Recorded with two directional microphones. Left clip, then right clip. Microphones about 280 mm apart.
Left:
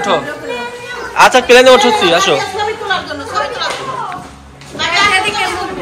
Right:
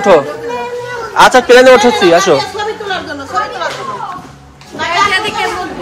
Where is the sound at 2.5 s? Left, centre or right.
Right.